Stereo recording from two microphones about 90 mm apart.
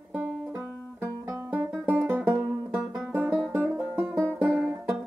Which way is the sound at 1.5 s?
20° right (ahead or behind).